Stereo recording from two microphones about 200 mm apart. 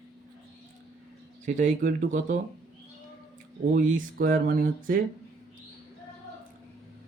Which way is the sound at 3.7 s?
45° right (ahead or behind).